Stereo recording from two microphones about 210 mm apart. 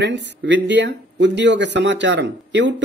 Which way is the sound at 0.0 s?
55° right (ahead or behind).